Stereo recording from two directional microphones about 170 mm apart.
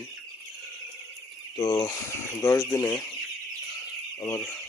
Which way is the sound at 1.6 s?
20° left (ahead or behind).